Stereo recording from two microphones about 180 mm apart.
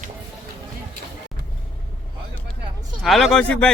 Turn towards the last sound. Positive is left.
turn(degrees=5)  # may be behind; listen again after turning